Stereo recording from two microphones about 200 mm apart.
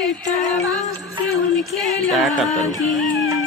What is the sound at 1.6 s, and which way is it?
Female singing, centre (ahead or behind).